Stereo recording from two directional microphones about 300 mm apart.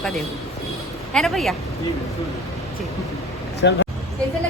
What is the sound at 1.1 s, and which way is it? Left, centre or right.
Speech, centre.